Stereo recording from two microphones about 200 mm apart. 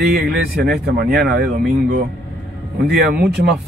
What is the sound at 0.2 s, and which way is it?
Speech, 50° right (ahead or behind).